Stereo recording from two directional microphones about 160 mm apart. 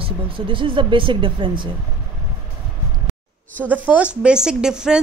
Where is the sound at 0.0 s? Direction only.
30° right (ahead or behind).